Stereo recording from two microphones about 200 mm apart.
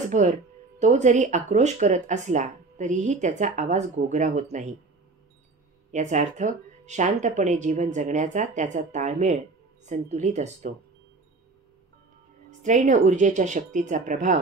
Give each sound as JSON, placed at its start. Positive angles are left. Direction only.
{"t": 0.1, "sound": "speech", "side_deg": -35}
{"t": 5.9, "sound": "speech", "side_deg": -35}
{"t": 12.4, "sound": "speech", "side_deg": -35}